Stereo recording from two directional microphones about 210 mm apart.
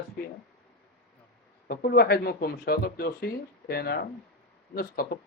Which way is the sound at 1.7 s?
45° left (ahead or behind).